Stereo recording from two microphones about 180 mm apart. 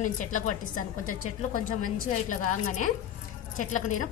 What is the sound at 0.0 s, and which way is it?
A woman's voice, 45° left (ahead or behind).